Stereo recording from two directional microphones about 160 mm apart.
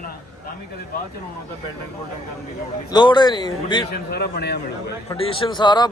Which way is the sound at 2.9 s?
25° left (ahead or behind).